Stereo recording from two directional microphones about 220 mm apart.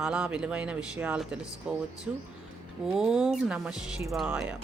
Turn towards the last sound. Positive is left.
turn(degrees=-5)  # may be behind; listen again after turning